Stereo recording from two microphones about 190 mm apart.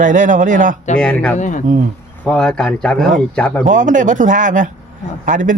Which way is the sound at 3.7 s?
40° right (ahead or behind).